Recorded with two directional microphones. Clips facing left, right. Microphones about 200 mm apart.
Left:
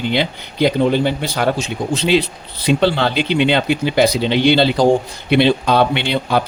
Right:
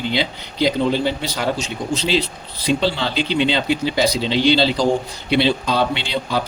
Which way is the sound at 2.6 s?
60° left (ahead or behind).